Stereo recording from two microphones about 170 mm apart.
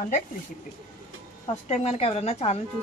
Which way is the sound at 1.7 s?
40° left (ahead or behind).